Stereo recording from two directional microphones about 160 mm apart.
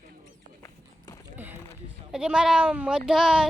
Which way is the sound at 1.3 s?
10° right (ahead or behind).